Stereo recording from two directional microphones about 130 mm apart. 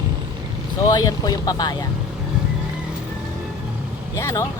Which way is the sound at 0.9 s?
30° left (ahead or behind).